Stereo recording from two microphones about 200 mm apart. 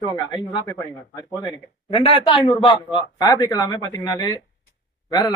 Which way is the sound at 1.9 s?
25° left (ahead or behind).